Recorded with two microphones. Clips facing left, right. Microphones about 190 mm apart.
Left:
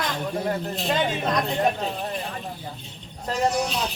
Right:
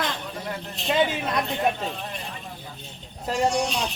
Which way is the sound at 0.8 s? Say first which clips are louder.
Right 5 dB; centre (ahead or behind).